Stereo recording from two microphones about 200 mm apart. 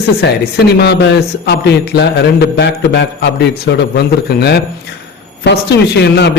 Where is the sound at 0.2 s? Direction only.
55° left (ahead or behind).